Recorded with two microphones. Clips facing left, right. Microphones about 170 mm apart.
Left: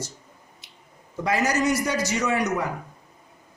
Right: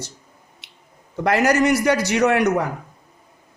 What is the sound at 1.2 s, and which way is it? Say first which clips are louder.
A man's voice: right 6 dB; 65° right (ahead or behind).